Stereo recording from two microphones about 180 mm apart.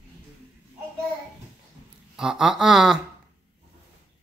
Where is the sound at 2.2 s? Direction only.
5° right (ahead or behind).